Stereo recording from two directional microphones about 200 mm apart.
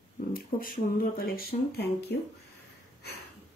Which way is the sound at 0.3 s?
45° left (ahead or behind).